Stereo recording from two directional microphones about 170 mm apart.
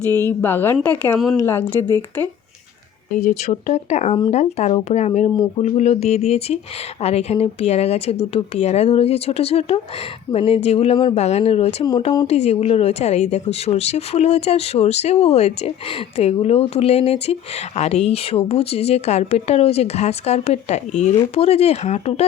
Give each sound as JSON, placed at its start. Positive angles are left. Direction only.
{"t": 0.2, "sound": "a woman's voice", "side_deg": 10}
{"t": 3.1, "sound": "a woman's voice", "side_deg": 50}
{"t": 5.3, "sound": "speech", "side_deg": 20}
{"t": 5.6, "sound": "a woman's voice", "side_deg": 40}